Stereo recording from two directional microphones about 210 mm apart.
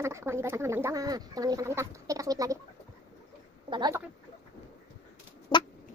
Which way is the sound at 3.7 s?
20° right (ahead or behind).